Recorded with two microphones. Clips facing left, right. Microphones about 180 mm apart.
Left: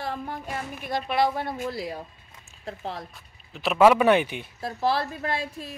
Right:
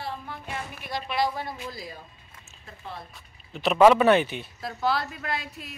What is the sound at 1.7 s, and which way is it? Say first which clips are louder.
Speech: left 7 dB; 70° left (ahead or behind).